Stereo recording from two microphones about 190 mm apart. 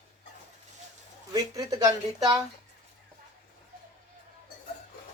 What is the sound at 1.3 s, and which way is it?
Speech, 20° right (ahead or behind).